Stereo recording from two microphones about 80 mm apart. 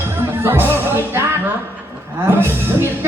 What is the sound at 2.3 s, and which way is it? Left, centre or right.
Music, right.